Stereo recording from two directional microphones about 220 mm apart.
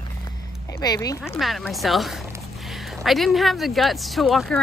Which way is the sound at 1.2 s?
Centre (ahead or behind).